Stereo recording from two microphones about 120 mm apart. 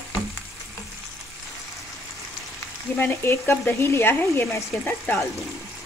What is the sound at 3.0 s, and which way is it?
Speech, 20° left (ahead or behind).